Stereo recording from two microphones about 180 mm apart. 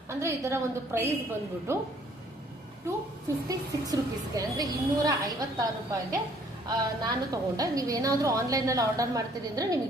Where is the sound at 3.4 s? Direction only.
20° right (ahead or behind).